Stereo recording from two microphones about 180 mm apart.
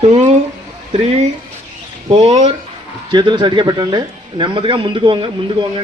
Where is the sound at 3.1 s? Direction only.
25° right (ahead or behind).